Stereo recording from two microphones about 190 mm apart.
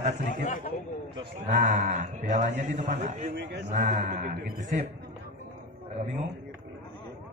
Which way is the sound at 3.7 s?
40° right (ahead or behind).